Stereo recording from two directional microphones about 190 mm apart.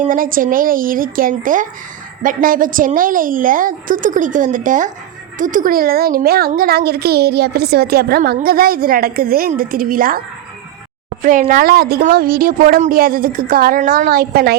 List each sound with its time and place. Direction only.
0.0 s a woman's voice: 45° right (ahead or behind)